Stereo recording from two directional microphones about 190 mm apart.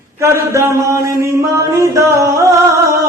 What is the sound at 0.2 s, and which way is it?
Chant, 15° right (ahead or behind).